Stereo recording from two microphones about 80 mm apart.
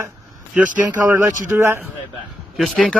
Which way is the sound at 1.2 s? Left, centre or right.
Right.